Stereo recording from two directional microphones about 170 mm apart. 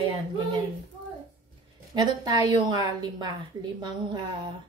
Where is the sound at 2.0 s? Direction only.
25° right (ahead or behind).